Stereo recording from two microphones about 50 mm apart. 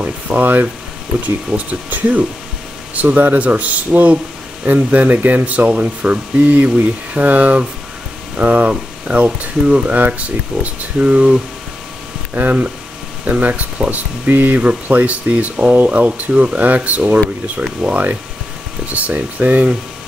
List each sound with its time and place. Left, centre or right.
0.0 s speech: right
12.4 s speech: right